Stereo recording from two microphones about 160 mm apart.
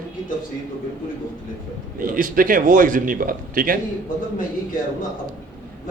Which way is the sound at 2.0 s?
60° right (ahead or behind).